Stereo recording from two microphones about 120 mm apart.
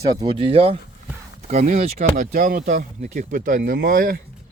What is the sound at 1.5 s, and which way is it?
Speech, 70° right (ahead or behind).